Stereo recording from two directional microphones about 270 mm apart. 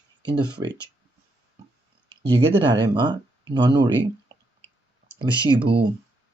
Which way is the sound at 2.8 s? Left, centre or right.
Centre.